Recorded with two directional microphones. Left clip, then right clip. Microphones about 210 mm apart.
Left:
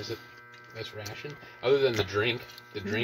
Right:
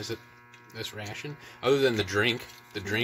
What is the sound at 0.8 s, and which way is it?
Speech, 50° right (ahead or behind).